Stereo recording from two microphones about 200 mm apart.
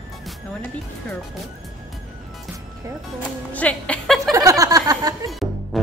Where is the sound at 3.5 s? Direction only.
5° left (ahead or behind).